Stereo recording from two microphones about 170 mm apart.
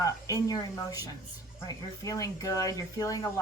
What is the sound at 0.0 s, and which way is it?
A woman's voice, 20° left (ahead or behind).